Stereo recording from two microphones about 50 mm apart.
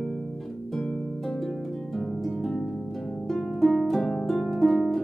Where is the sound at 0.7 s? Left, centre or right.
Left.